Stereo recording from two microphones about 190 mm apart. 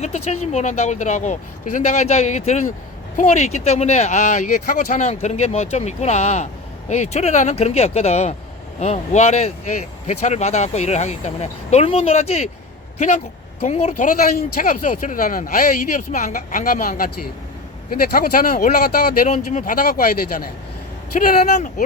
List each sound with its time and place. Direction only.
0.0 s speech: 35° left (ahead or behind)
14.3 s speech: 45° left (ahead or behind)
18.1 s speech: 50° left (ahead or behind)
19.3 s speech: 40° left (ahead or behind)